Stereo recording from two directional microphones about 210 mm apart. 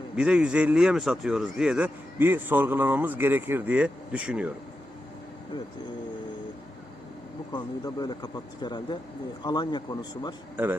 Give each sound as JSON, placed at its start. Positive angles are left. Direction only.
{"t": 0.2, "sound": "speech", "side_deg": -5}
{"t": 7.5, "sound": "speech", "side_deg": 20}